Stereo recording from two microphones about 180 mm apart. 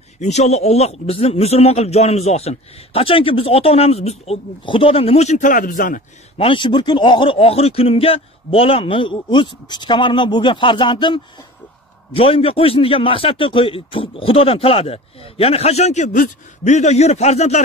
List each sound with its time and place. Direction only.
0.2 s a man's voice: 40° left (ahead or behind)
6.3 s a man's voice: 30° left (ahead or behind)